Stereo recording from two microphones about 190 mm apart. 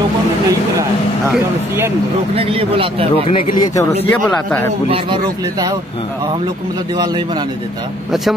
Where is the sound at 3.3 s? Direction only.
30° left (ahead or behind).